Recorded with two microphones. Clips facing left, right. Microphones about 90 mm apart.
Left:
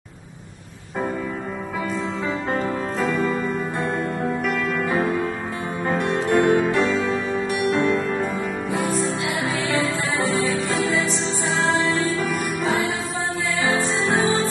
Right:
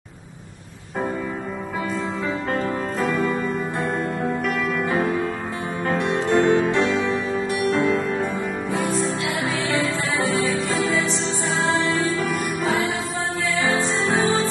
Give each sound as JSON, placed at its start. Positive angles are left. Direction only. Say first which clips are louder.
{"t": 3.1, "sound": "music", "louder": "even", "side_deg": -5}
{"t": 6.3, "sound": "music", "louder": "even", "side_deg": 10}
{"t": 7.4, "sound": "music", "louder": "even", "side_deg": -30}
{"t": 7.7, "sound": "music", "louder": "even", "side_deg": 0}
{"t": 13.7, "sound": "music", "louder": "even", "side_deg": 0}